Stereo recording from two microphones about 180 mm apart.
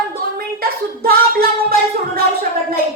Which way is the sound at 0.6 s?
55° right (ahead or behind).